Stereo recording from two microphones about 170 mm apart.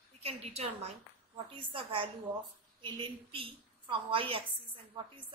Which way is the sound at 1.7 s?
30° right (ahead or behind).